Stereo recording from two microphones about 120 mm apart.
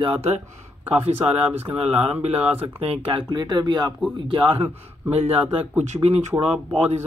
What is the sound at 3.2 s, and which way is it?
A man's voice, 35° right (ahead or behind).